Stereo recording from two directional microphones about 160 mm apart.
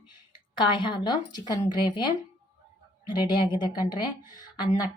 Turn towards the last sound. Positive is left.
turn(degrees=25)  # may be behind; listen again after turning